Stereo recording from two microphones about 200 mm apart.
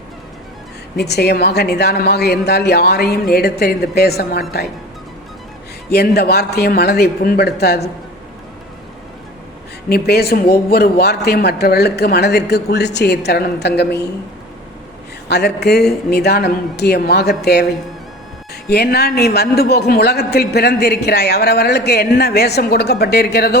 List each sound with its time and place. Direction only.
0.9 s a man's voice: 55° left (ahead or behind)
5.9 s a man's voice: 55° left (ahead or behind)
9.9 s a man's voice: 50° left (ahead or behind)
15.3 s a man's voice: 55° left (ahead or behind)
18.7 s a man's voice: 50° left (ahead or behind)